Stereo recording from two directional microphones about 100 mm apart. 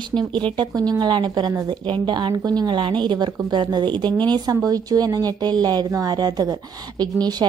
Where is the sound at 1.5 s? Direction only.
35° right (ahead or behind).